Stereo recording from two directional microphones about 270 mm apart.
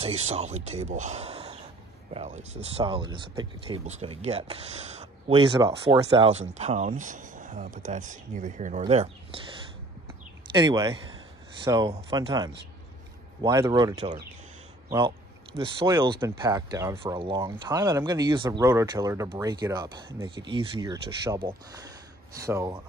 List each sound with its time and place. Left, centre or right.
0.0 s speech: right
10.5 s speech: centre